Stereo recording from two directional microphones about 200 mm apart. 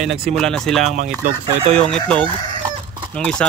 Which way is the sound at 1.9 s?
5° left (ahead or behind).